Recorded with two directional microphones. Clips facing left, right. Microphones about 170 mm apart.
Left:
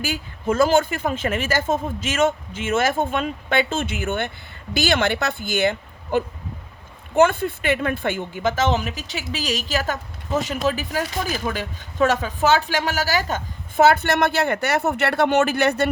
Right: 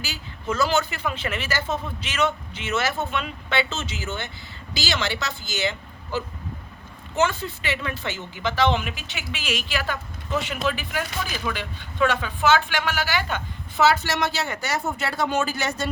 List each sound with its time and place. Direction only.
0.0 s a woman's voice: 50° left (ahead or behind)